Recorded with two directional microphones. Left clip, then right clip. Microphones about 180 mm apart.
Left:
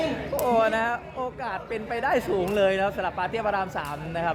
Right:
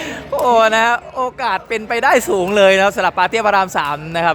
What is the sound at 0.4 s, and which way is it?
Speech, 55° right (ahead or behind).